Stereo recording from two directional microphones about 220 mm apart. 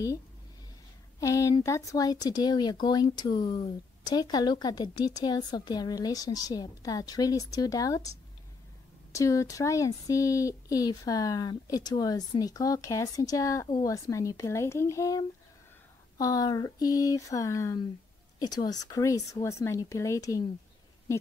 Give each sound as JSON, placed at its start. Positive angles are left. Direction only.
{"t": 1.2, "sound": "speech", "side_deg": 15}